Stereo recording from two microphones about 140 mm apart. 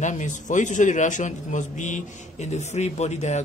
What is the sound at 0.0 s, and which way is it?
A man's voice, 60° left (ahead or behind).